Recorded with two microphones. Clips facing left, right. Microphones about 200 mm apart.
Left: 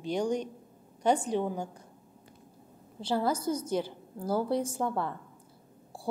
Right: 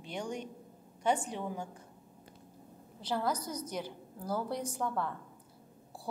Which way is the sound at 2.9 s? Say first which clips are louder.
Left 5 dB; 30° left (ahead or behind).